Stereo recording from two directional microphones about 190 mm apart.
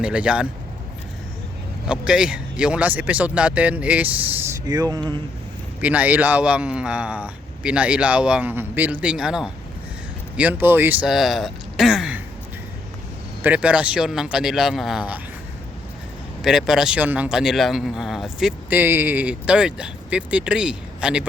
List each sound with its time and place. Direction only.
0.0 s speech: 5° right (ahead or behind)
1.9 s a man's voice: 5° right (ahead or behind)
4.7 s speech: 20° right (ahead or behind)
5.8 s a man's voice: 10° right (ahead or behind)
13.4 s speech: 5° right (ahead or behind)
16.4 s speech: centre (ahead or behind)